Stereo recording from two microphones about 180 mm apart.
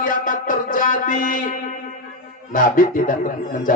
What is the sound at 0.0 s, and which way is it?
Music, 50° left (ahead or behind).